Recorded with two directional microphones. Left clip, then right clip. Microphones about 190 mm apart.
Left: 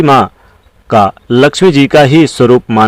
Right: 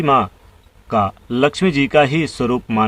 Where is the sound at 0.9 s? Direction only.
40° left (ahead or behind).